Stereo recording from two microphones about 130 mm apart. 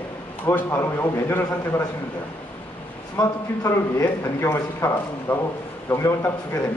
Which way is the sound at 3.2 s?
25° left (ahead or behind).